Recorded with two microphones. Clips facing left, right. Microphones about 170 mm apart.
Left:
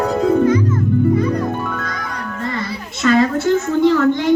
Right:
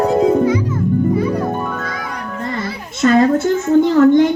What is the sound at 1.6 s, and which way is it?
Music, 45° right (ahead or behind).